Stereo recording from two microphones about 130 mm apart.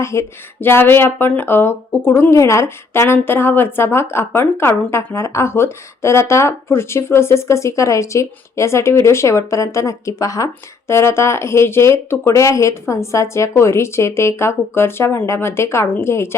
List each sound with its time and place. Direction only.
0.0 s speech: 20° left (ahead or behind)